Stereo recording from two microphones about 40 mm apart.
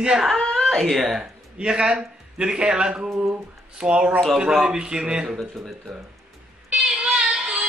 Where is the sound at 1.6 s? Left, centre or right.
Right.